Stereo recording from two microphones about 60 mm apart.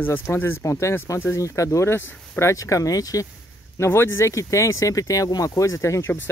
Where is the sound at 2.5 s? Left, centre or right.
Left.